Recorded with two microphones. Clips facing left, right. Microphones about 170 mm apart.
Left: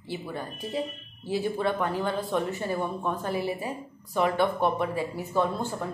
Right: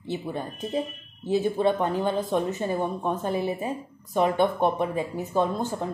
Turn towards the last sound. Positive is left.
turn(degrees=-20)  # may be behind; listen again after turning